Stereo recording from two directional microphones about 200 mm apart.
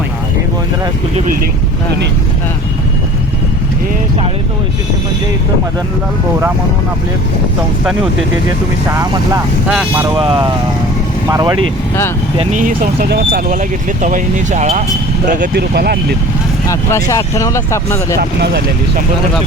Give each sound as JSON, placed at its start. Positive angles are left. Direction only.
{"t": 8.9, "sound": "speech", "side_deg": -15}
{"t": 10.2, "sound": "speech", "side_deg": -25}
{"t": 12.4, "sound": "speech", "side_deg": -40}
{"t": 13.5, "sound": "speech", "side_deg": -40}
{"t": 16.6, "sound": "speech", "side_deg": 15}
{"t": 18.2, "sound": "speech", "side_deg": -55}